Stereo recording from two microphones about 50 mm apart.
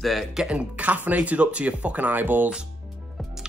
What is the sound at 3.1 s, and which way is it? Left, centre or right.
Music, centre.